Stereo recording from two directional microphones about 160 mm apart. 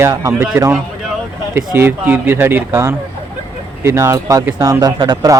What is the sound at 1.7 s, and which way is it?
Speech, 10° right (ahead or behind).